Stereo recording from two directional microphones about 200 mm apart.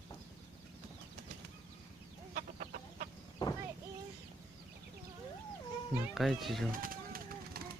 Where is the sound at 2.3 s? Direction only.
40° right (ahead or behind).